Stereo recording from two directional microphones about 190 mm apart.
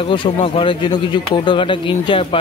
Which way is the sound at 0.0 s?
25° left (ahead or behind).